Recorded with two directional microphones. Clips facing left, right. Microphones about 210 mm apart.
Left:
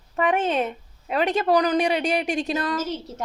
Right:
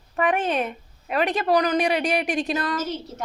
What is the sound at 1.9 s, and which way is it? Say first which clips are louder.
Speech: even; 25° left (ahead or behind).